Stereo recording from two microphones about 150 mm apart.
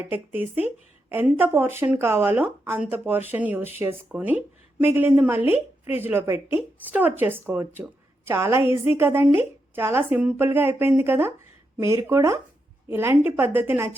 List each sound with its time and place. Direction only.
0.4 s a woman's voice: 15° right (ahead or behind)